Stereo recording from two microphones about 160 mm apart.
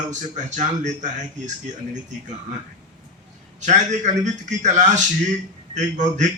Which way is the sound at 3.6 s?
50° right (ahead or behind).